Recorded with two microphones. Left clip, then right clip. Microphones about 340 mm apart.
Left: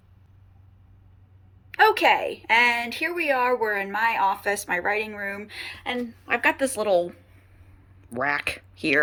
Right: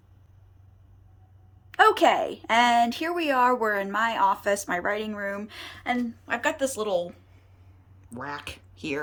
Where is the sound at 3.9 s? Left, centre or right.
Right.